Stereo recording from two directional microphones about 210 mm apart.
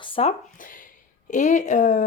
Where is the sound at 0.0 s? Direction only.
25° left (ahead or behind).